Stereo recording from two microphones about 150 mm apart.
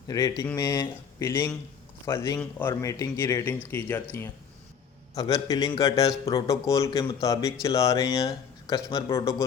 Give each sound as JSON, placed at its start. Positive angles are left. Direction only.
{"t": 0.1, "sound": "a man's voice", "side_deg": 25}
{"t": 5.1, "sound": "a man's voice", "side_deg": 25}